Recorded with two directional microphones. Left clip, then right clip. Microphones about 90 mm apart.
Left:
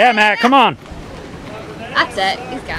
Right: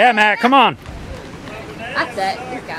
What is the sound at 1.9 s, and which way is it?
Speech, 45° left (ahead or behind).